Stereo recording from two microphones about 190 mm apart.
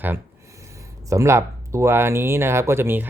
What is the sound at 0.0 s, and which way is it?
Speech, 15° right (ahead or behind).